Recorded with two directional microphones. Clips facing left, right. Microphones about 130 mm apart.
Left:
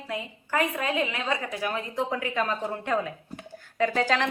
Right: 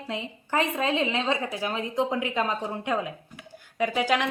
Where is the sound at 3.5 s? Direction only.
15° right (ahead or behind).